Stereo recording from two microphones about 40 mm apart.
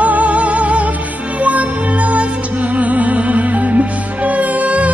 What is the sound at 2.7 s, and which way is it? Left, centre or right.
Music, right.